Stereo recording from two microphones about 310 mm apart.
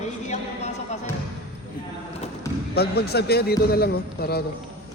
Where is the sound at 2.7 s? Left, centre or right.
Left.